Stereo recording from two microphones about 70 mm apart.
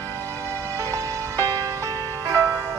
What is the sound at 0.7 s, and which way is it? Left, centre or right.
Music, right.